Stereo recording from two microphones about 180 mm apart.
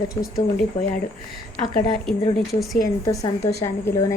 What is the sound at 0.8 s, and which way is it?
Speech, 25° left (ahead or behind).